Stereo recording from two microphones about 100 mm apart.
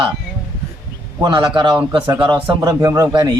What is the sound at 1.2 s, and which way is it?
Speech, 50° right (ahead or behind).